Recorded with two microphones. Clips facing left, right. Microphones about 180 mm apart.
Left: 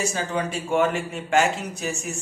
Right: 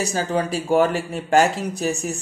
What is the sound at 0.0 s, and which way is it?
Speech, 35° right (ahead or behind).